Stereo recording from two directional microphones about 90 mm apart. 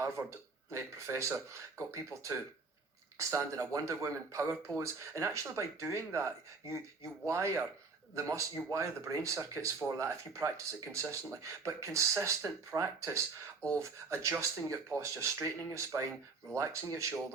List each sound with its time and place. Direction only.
0.7 s speech: 30° right (ahead or behind)